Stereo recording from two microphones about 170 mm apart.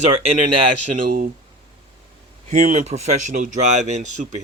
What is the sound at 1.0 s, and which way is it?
Speech, 55° right (ahead or behind).